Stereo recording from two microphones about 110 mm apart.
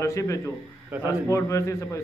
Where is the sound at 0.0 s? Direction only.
30° left (ahead or behind).